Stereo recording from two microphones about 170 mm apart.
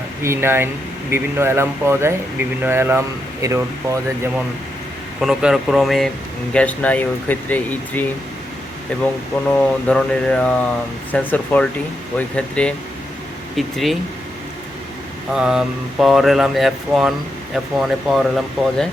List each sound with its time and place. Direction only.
0.2 s speech: 15° right (ahead or behind)
5.2 s speech: 5° right (ahead or behind)
9.3 s speech: 10° left (ahead or behind)
15.3 s speech: 5° right (ahead or behind)